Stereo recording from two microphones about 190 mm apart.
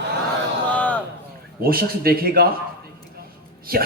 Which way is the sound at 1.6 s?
50° right (ahead or behind).